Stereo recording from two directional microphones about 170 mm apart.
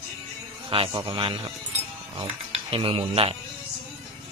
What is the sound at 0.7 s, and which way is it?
Speech, 30° right (ahead or behind).